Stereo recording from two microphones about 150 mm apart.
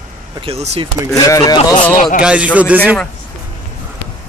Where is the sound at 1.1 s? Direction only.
25° left (ahead or behind).